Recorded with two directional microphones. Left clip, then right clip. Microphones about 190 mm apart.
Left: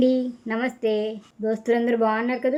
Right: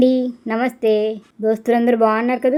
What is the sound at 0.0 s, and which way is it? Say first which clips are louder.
Speech: right 5 dB; 30° right (ahead or behind).